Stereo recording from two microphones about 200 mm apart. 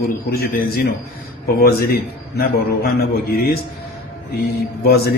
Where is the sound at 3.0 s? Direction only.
50° left (ahead or behind).